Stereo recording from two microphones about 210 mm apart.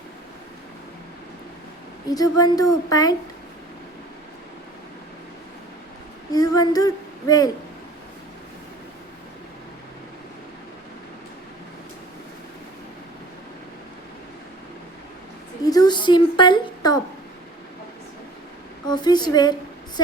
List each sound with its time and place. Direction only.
2.0 s a woman's voice: 15° left (ahead or behind)
6.3 s speech: 20° left (ahead or behind)
15.6 s a woman's voice: 20° left (ahead or behind)
18.9 s a woman's voice: 20° left (ahead or behind)